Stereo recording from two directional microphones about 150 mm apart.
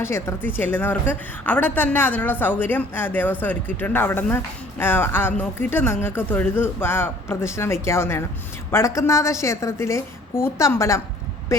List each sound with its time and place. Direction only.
0.0 s a woman's voice: 15° left (ahead or behind)